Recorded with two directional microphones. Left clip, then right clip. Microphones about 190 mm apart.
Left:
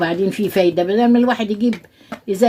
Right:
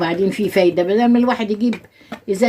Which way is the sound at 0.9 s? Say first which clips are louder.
Even; 40° left (ahead or behind).